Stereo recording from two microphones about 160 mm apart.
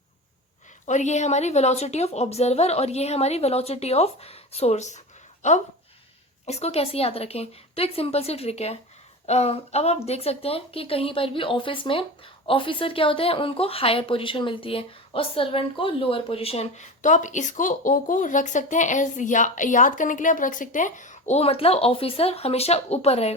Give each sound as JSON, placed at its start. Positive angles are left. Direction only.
{"t": 0.9, "sound": "speech", "side_deg": 45}